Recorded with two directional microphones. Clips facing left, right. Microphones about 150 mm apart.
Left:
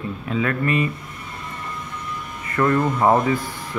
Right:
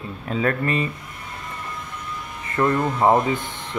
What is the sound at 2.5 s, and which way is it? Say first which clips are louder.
Speech: left 1 dB; 25° right (ahead or behind).